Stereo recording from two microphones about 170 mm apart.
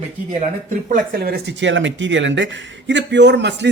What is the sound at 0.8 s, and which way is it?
A man's voice, 55° right (ahead or behind).